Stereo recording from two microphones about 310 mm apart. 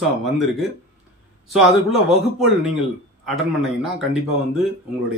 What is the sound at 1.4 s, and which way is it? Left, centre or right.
Speech, centre.